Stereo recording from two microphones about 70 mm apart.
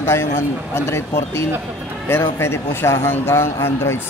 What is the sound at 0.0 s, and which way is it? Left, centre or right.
A man's voice, left.